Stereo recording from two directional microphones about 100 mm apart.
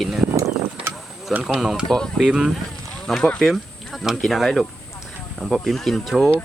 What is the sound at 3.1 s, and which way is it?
Speech, 5° left (ahead or behind).